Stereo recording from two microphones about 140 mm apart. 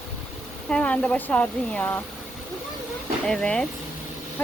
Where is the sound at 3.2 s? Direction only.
5° left (ahead or behind).